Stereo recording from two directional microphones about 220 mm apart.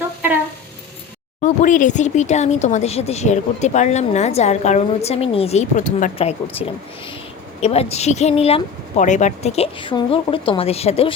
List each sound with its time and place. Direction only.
1.4 s speech: 35° left (ahead or behind)